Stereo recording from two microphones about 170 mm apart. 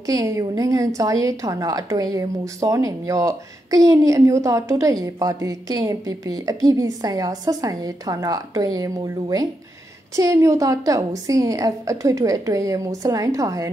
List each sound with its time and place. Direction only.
0.0 s a woman's voice: 20° right (ahead or behind)